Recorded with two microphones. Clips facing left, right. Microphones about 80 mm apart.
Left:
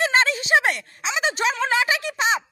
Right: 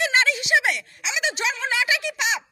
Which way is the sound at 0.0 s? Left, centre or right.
Left.